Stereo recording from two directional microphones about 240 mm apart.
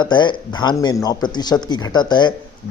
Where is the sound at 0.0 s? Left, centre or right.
Centre.